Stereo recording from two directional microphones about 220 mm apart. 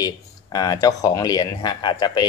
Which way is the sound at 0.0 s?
15° left (ahead or behind).